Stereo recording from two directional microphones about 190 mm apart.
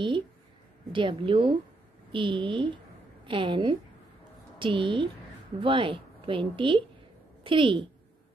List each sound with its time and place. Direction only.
0.9 s a woman's voice: 25° right (ahead or behind)